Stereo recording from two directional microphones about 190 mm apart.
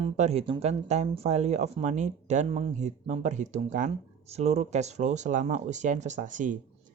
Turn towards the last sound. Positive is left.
turn(degrees=-45)  # may be behind; listen again after turning